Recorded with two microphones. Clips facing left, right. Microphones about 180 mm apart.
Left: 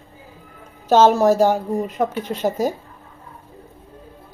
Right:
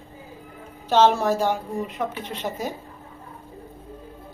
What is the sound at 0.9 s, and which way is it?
A woman's voice, 45° left (ahead or behind).